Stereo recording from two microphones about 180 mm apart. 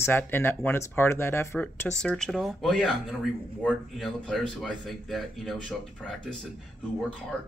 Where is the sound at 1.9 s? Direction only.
5° left (ahead or behind).